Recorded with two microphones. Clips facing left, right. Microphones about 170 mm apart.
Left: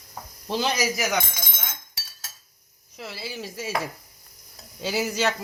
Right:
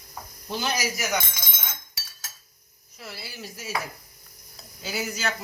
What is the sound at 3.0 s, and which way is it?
Speech, 90° left.